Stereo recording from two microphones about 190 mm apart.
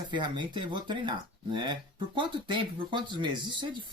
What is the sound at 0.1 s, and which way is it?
Speech, 25° right (ahead or behind).